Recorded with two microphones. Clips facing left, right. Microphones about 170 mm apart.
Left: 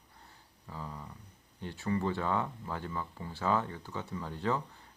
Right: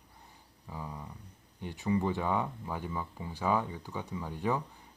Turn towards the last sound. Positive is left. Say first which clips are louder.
# right 1 dB
turn(degrees=-15)  # may be behind; listen again after turning